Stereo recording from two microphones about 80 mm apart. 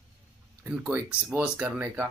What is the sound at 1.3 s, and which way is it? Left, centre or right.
Speech, centre.